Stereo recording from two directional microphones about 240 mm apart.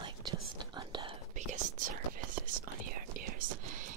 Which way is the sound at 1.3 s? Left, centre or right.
Right.